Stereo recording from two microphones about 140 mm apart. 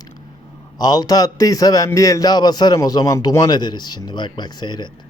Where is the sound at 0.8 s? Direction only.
30° left (ahead or behind).